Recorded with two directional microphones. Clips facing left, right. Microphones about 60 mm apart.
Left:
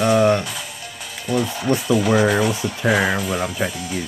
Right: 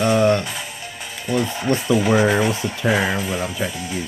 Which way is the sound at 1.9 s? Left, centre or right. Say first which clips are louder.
Even; right.